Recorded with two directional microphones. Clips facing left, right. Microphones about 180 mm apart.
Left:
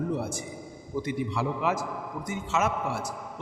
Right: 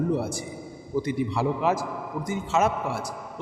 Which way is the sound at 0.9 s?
35° right (ahead or behind).